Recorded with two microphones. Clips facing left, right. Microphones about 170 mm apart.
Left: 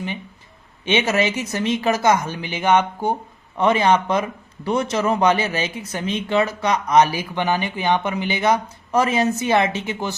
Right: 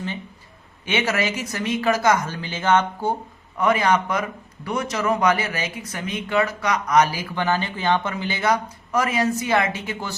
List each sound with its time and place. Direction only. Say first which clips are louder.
0.9 s speech: left 4 dB; 20° left (ahead or behind)